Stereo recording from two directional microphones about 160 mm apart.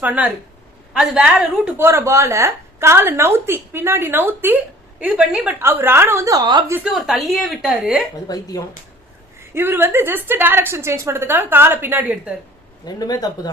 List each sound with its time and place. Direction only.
0.0 s a woman's voice: 10° right (ahead or behind); by 6.7 s 25° right (ahead or behind)
6.7 s a woman's voice: 5° right (ahead or behind)
8.3 s speech: 20° left (ahead or behind)
9.6 s a woman's voice: 15° right (ahead or behind)
12.8 s speech: 25° left (ahead or behind)